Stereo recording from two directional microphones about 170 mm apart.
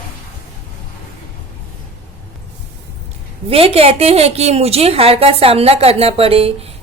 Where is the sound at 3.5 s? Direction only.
35° right (ahead or behind).